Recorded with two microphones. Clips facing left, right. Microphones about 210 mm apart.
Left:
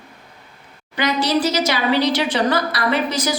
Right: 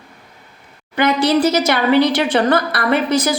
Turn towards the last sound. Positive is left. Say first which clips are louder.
# right 4 dB
turn(degrees=-55)  # may be behind; listen again after turning